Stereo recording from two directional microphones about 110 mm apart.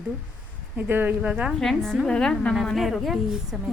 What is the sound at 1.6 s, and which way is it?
A woman's voice, centre (ahead or behind).